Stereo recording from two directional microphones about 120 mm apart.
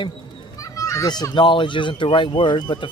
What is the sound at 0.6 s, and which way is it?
A child's voice, 25° left (ahead or behind).